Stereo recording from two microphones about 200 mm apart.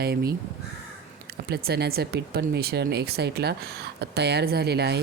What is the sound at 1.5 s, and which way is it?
Speech, 55° right (ahead or behind).